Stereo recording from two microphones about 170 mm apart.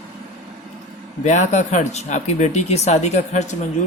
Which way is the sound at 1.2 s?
45° left (ahead or behind).